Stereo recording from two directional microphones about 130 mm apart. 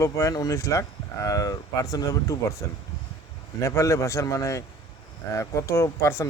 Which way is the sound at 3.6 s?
25° left (ahead or behind).